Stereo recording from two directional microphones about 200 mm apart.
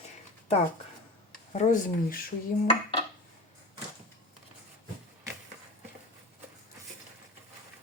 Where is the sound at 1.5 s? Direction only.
40° left (ahead or behind).